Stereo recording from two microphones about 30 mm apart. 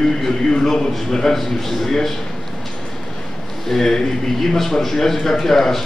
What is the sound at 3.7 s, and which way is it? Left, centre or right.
Speech, centre.